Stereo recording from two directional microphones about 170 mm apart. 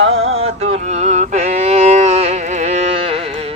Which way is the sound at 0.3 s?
40° right (ahead or behind).